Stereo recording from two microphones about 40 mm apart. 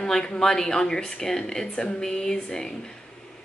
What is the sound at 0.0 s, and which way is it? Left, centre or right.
Speech, centre.